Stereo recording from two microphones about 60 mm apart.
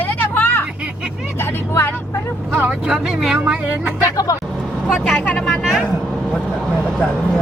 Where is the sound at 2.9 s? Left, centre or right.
Centre.